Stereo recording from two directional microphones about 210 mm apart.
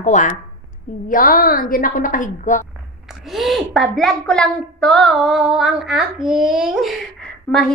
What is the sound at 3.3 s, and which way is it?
A woman's voice, centre (ahead or behind).